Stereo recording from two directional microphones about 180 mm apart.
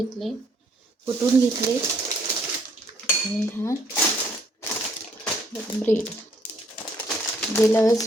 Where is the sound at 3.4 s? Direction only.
10° left (ahead or behind).